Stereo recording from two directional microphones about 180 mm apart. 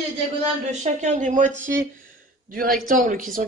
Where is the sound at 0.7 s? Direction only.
40° right (ahead or behind).